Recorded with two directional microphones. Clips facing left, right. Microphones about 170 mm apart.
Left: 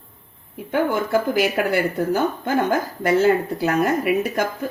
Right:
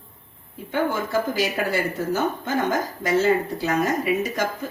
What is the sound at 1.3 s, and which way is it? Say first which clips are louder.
Speech: left 4 dB; 60° left (ahead or behind).